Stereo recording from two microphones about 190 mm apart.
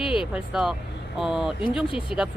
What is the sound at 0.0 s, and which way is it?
Vehicle, 25° left (ahead or behind).